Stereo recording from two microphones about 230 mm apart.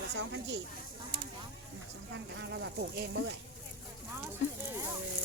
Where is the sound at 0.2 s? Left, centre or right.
Right.